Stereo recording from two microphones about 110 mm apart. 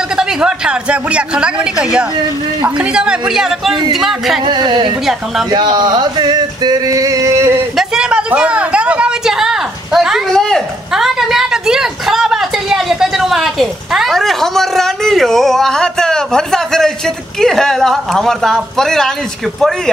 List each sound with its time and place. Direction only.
0.2 s a woman's voice: 5° right (ahead or behind)
4.5 s speech: 40° right (ahead or behind)
5.5 s a sound: 40° right (ahead or behind)
7.7 s a woman's voice: 5° right (ahead or behind)